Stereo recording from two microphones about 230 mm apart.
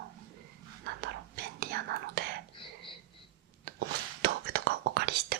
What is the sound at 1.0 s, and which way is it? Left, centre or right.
Whispering, right.